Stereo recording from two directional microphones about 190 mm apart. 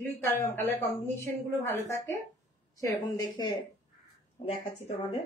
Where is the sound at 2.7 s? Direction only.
20° left (ahead or behind).